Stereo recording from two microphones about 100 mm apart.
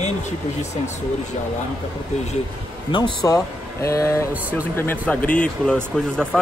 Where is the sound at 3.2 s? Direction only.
35° left (ahead or behind).